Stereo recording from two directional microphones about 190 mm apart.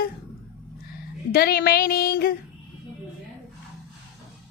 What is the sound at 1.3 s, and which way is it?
A woman's voice, 55° left (ahead or behind).